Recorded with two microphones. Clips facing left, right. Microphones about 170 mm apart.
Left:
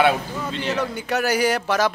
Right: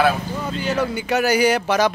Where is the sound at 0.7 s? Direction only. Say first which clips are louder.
Right 4 dB; centre (ahead or behind).